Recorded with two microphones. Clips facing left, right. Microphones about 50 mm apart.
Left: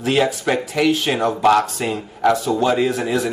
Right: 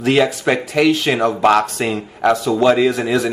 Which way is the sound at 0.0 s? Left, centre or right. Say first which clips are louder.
Right 3 dB; right.